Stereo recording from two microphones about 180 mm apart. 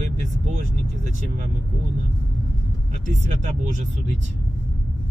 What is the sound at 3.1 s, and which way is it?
Speech, 40° right (ahead or behind).